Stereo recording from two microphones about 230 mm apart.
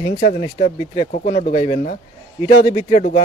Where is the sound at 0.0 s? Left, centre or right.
Left.